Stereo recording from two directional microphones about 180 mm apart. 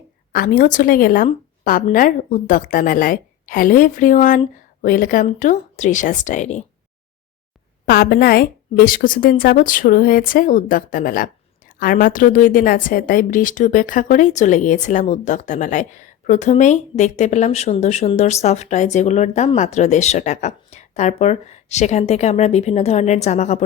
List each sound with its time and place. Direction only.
0.3 s a woman's voice: 50° left (ahead or behind)
7.9 s a woman's voice: 55° left (ahead or behind); by 23.6 s 40° left (ahead or behind)